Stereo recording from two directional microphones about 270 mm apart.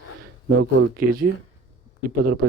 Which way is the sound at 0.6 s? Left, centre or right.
Right.